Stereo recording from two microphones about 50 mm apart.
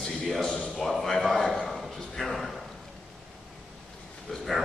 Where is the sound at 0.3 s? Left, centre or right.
Centre.